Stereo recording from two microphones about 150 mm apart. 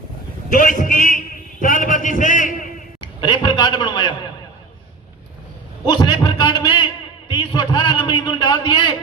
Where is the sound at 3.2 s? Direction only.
30° left (ahead or behind).